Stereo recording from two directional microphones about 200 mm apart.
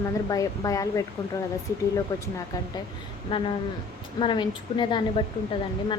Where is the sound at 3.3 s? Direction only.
25° left (ahead or behind).